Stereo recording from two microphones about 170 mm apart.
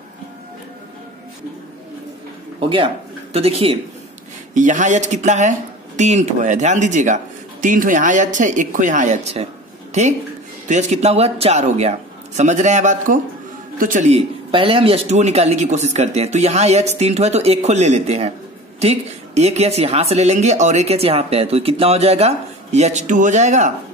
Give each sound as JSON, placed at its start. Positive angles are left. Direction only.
{"t": 3.3, "sound": "a woman's voice", "side_deg": -35}
{"t": 4.6, "sound": "a woman's voice", "side_deg": -50}